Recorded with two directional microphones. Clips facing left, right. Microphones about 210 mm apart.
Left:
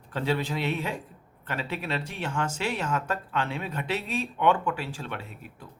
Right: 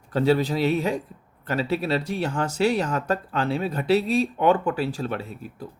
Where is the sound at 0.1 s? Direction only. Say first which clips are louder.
Right 8 dB; 40° right (ahead or behind).